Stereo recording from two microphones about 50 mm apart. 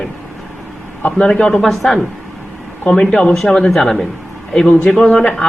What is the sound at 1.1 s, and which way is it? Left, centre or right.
Speech, centre.